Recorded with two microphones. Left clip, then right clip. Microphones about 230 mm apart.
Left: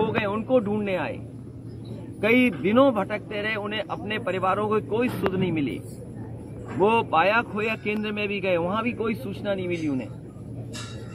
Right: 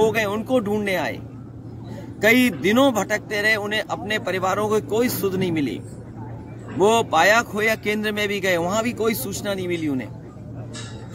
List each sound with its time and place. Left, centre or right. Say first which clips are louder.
0.0 s speech: right 5 dB; centre
2.2 s speech: right 4 dB; centre
6.8 s speech: right 4 dB; right